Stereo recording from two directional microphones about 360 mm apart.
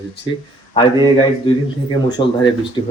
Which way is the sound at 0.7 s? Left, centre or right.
Centre.